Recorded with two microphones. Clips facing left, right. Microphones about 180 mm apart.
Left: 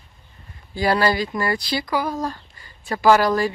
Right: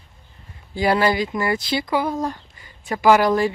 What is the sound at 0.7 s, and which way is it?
Speech, 20° right (ahead or behind).